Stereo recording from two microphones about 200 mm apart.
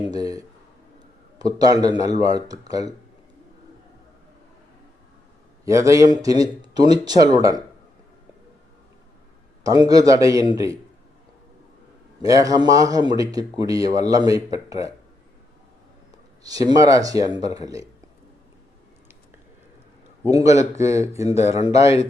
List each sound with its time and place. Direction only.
0.1 s speech: 20° right (ahead or behind)
1.5 s speech: 20° right (ahead or behind)
5.6 s speech: 15° right (ahead or behind)
9.6 s speech: 20° right (ahead or behind)
12.2 s speech: 15° right (ahead or behind)
16.1 s speech: 20° right (ahead or behind)
20.2 s speech: 15° right (ahead or behind)
21.6 s speech: 30° left (ahead or behind)